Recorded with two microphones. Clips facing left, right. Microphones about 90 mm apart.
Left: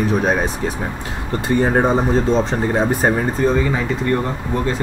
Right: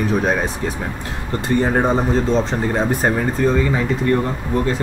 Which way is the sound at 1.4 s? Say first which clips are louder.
Left 1 dB; 15° left (ahead or behind).